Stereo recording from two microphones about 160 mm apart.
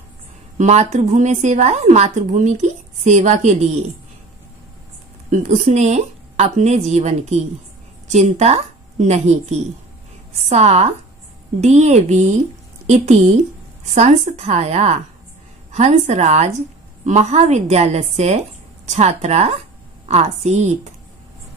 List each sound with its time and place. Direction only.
0.6 s a woman's voice: 45° right (ahead or behind)
5.3 s a woman's voice: 50° right (ahead or behind)